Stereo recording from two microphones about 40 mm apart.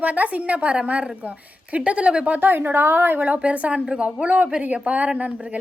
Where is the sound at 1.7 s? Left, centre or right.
Right.